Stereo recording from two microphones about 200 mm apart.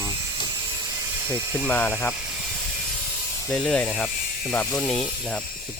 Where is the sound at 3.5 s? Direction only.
5° left (ahead or behind).